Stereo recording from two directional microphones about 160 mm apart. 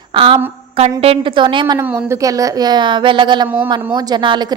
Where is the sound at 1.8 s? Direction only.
15° right (ahead or behind).